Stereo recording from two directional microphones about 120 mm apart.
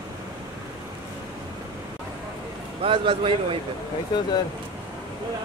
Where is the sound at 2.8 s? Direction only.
45° right (ahead or behind).